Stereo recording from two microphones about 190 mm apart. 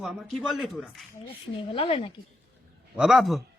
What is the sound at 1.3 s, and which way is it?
Speech, 30° left (ahead or behind).